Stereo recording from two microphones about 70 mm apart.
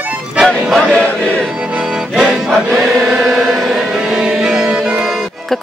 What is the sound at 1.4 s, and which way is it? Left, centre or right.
Accordion, centre.